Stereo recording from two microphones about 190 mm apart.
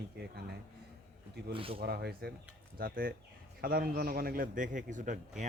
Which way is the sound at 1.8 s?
55° right (ahead or behind).